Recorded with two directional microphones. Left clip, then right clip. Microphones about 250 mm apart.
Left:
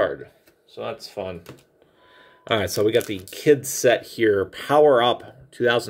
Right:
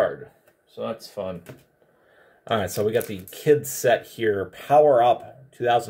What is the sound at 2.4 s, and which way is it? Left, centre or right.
Speech, left.